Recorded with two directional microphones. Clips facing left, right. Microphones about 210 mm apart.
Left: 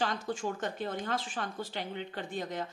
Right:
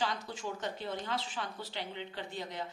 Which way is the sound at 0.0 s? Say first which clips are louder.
Left 4 dB; 50° left (ahead or behind).